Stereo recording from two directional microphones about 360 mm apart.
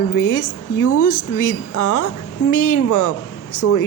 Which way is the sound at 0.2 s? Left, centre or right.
Left.